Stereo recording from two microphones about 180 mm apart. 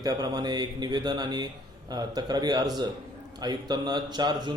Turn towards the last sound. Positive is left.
turn(degrees=-25)  # may be behind; listen again after turning